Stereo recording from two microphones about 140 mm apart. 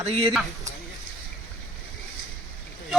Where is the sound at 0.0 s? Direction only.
45° right (ahead or behind).